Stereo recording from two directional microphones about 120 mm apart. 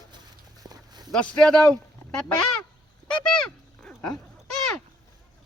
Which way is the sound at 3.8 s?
5° left (ahead or behind).